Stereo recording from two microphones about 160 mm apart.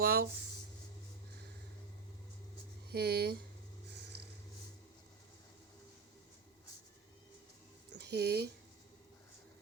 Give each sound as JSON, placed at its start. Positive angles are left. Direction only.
{"t": 0.0, "sound": "writing", "side_deg": -70}
{"t": 2.9, "sound": "speech", "side_deg": -90}
{"t": 7.9, "sound": "speech", "side_deg": -90}